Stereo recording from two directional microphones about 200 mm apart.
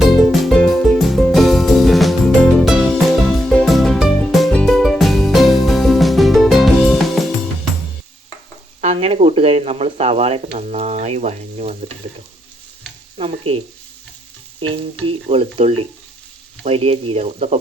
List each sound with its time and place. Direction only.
0.0 s music: centre (ahead or behind)
8.8 s stir: 30° right (ahead or behind)
13.1 s speech: 30° right (ahead or behind)
14.7 s speech: 30° right (ahead or behind)